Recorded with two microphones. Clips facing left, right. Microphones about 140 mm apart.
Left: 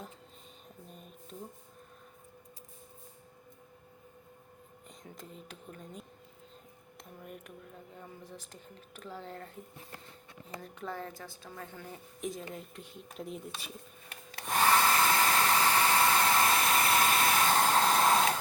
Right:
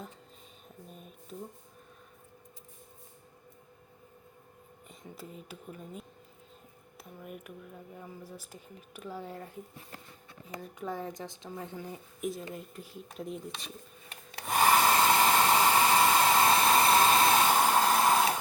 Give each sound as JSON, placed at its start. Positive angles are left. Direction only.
{"t": 0.9, "sound": "a sound", "side_deg": -5}
{"t": 4.9, "sound": "speech", "side_deg": -5}
{"t": 10.6, "sound": "speech", "side_deg": -10}
{"t": 12.2, "sound": "speech", "side_deg": 0}
{"t": 14.5, "sound": "hair dryer", "side_deg": -15}
{"t": 17.6, "sound": "a sound", "side_deg": -5}